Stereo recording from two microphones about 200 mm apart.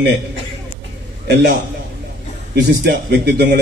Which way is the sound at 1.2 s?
55° right (ahead or behind).